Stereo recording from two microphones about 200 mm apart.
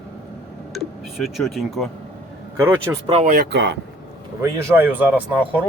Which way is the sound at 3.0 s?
35° right (ahead or behind).